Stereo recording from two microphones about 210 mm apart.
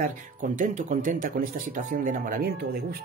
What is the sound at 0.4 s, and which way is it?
Speech, 35° right (ahead or behind).